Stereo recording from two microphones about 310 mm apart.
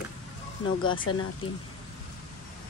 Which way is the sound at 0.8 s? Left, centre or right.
Left.